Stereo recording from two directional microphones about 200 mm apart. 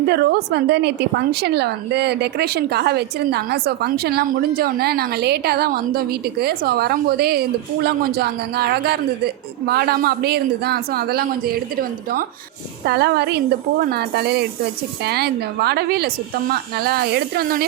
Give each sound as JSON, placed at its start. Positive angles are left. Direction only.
{"t": 0.1, "sound": "a woman's voice", "side_deg": -55}